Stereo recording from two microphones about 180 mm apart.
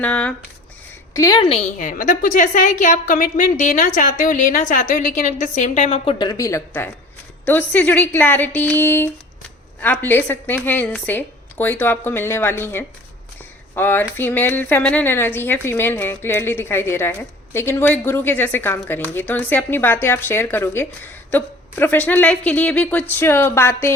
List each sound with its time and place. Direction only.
0.0 s a woman's voice: 10° left (ahead or behind)
1.1 s a woman's voice: 20° left (ahead or behind)
1.8 s a woman's voice: 50° left (ahead or behind)
6.1 s a woman's voice: 20° left (ahead or behind)